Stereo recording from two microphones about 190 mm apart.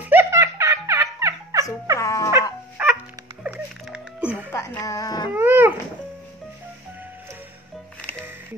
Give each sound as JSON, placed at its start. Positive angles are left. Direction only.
{"t": 0.0, "sound": "music", "side_deg": -10}
{"t": 2.0, "sound": "music", "side_deg": 15}
{"t": 2.8, "sound": "dog", "side_deg": -10}
{"t": 3.4, "sound": "music", "side_deg": -5}
{"t": 4.5, "sound": "music", "side_deg": 15}
{"t": 5.3, "sound": "dog", "side_deg": -10}